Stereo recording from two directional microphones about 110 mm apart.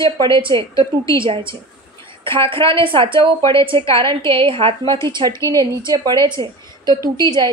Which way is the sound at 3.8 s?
25° left (ahead or behind).